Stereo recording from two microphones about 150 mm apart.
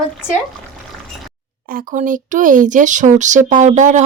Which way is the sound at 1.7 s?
60° right (ahead or behind).